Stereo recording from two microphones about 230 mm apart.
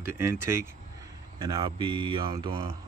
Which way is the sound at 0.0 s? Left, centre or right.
Centre.